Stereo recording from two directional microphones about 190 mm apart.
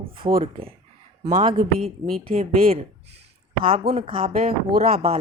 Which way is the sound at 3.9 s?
30° right (ahead or behind).